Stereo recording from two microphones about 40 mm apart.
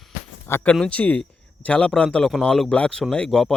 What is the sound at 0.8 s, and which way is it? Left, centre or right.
Speech, left.